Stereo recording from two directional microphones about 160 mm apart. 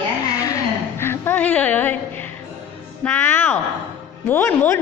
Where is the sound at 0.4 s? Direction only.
20° left (ahead or behind).